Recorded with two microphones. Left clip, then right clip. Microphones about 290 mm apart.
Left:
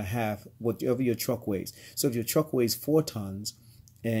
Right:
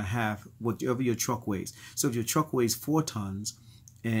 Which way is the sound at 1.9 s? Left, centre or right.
Right.